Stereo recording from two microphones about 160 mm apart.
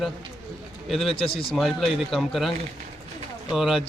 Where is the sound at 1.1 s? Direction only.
35° left (ahead or behind).